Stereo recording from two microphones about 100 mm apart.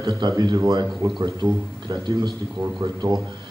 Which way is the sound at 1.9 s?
50° right (ahead or behind).